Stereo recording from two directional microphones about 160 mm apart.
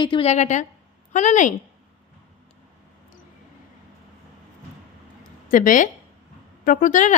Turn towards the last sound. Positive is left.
turn(degrees=55)  # may be behind; listen again after turning